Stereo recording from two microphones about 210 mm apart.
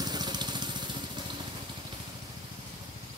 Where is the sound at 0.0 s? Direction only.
20° right (ahead or behind).